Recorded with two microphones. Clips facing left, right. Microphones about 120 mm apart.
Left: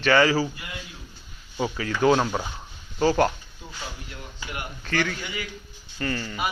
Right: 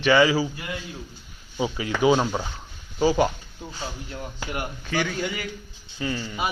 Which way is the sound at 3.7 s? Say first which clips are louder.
Right 4 dB; 35° right (ahead or behind).